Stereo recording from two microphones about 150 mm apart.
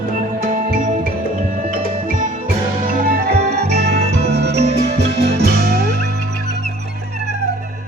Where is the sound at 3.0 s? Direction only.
80° right.